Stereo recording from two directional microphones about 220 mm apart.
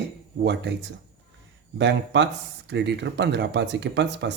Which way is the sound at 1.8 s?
55° right (ahead or behind).